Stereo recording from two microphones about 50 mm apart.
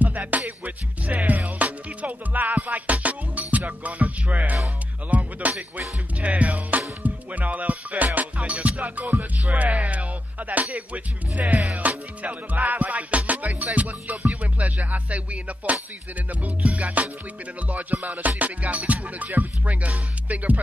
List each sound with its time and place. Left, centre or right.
0.0 s music: right
9.8 s a sound: right
10.5 s music: right
20.2 s speech: right